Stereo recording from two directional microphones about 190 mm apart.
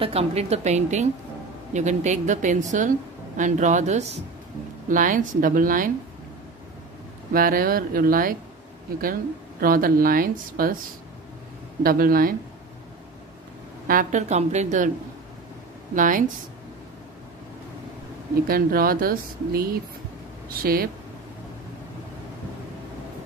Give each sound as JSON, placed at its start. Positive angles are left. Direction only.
{"t": 0.0, "sound": "speech", "side_deg": -30}
{"t": 7.3, "sound": "speech", "side_deg": -50}
{"t": 9.6, "sound": "speech", "side_deg": -50}
{"t": 11.8, "sound": "speech", "side_deg": -50}
{"t": 13.8, "sound": "speech", "side_deg": -45}
{"t": 15.9, "sound": "speech", "side_deg": -45}
{"t": 18.5, "sound": "speech", "side_deg": -50}